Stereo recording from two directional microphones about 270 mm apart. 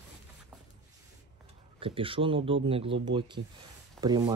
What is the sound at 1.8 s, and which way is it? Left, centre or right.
Speech, centre.